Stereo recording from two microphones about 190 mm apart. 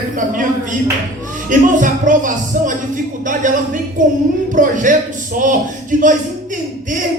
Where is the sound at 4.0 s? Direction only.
45° right (ahead or behind).